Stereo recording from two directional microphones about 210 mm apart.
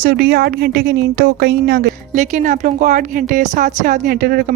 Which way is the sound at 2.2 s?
35° right (ahead or behind).